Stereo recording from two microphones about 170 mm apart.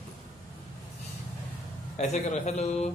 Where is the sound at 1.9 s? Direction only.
40° left (ahead or behind).